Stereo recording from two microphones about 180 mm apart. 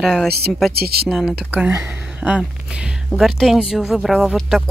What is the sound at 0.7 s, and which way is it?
Speech, 60° right (ahead or behind).